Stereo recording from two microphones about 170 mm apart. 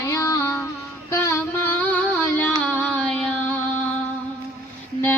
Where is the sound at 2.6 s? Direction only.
5° left (ahead or behind).